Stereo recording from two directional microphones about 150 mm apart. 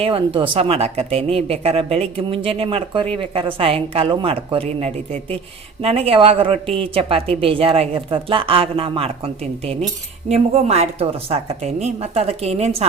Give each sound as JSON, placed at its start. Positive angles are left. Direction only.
{"t": 0.0, "sound": "a woman's voice", "side_deg": -35}